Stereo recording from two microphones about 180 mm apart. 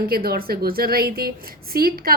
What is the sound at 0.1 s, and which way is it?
A woman's voice, 55° right (ahead or behind).